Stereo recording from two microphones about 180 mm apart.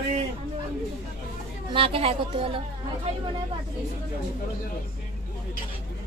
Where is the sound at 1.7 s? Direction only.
30° right (ahead or behind).